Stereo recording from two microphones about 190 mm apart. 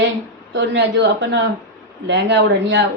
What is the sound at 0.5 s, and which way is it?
A woman's voice, 65° right (ahead or behind).